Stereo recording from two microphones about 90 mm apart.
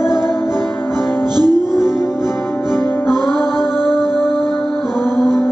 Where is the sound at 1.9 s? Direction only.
30° left (ahead or behind).